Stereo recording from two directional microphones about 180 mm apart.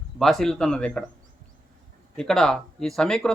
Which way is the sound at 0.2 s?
Centre (ahead or behind).